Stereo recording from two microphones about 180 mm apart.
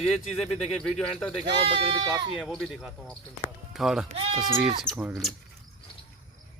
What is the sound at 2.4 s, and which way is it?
Speech, 5° left (ahead or behind).